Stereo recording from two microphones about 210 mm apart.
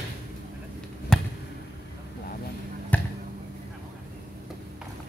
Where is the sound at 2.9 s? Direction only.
5° left (ahead or behind).